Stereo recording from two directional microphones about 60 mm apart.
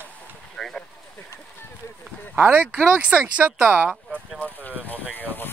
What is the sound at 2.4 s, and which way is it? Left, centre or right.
Speech, right.